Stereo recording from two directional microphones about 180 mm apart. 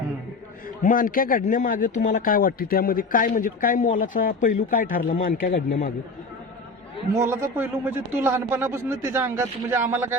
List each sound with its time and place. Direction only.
0.8 s speech: 50° left (ahead or behind)
7.1 s speech: 15° right (ahead or behind)